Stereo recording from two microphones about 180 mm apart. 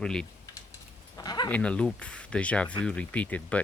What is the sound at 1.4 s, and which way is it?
Speech, 5° left (ahead or behind).